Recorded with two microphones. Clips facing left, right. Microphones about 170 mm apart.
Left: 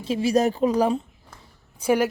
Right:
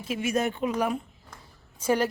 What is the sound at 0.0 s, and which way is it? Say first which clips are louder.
Speech: left 6 dB; 30° left (ahead or behind).